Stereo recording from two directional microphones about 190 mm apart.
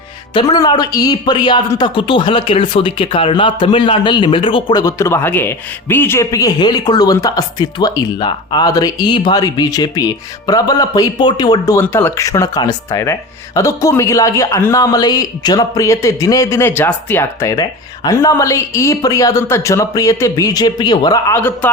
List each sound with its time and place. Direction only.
0.3 s speech: 20° left (ahead or behind)